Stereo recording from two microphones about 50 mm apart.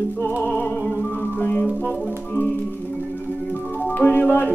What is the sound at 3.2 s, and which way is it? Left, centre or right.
Music, left.